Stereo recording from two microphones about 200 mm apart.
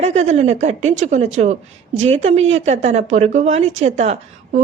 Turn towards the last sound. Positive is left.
turn(degrees=-35)  # may be behind; listen again after turning